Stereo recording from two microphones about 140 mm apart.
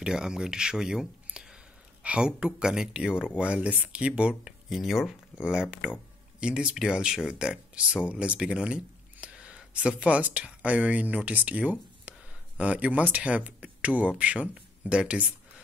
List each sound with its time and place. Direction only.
0.0 s speech: 5° right (ahead or behind)